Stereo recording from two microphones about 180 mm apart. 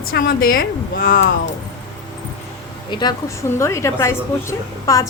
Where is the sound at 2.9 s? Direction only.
25° left (ahead or behind).